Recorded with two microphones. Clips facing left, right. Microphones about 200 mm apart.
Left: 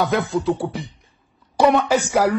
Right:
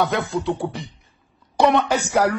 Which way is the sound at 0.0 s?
Centre (ahead or behind).